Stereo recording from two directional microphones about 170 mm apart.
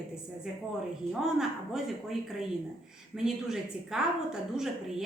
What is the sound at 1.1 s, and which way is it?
Speech, centre (ahead or behind).